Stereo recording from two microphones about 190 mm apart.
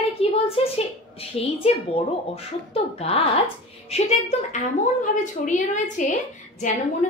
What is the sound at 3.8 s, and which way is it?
A woman's voice, 35° left (ahead or behind).